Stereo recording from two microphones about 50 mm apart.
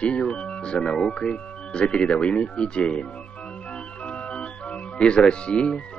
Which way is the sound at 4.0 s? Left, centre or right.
Left.